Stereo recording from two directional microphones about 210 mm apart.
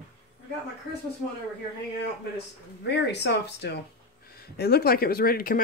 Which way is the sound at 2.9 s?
55° left (ahead or behind).